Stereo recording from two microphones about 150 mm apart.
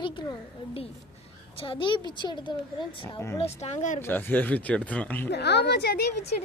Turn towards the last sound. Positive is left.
turn(degrees=90)